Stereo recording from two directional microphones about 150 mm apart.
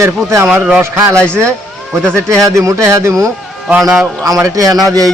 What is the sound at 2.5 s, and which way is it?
Speech, 20° right (ahead or behind).